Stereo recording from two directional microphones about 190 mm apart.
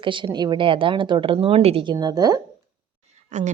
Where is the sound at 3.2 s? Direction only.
40° right (ahead or behind).